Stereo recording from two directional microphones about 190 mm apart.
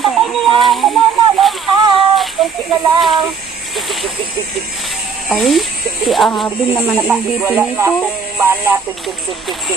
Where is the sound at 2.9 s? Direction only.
Centre (ahead or behind).